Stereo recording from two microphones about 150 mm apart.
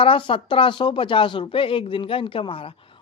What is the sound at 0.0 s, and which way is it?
A man's voice, 35° left (ahead or behind).